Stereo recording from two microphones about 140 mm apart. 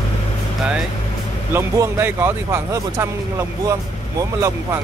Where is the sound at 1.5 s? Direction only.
20° right (ahead or behind).